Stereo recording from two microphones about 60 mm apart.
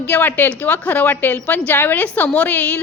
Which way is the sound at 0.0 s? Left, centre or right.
Left.